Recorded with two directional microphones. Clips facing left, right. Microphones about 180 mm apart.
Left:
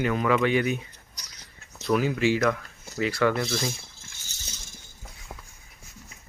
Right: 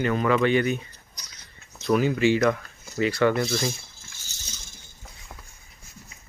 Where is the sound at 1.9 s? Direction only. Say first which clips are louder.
Right 2 dB; centre (ahead or behind).